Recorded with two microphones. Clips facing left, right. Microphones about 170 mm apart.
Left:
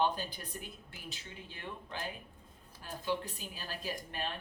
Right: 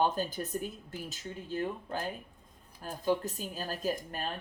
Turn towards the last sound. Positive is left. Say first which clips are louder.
# right 6 dB
turn(degrees=-45)  # may be behind; listen again after turning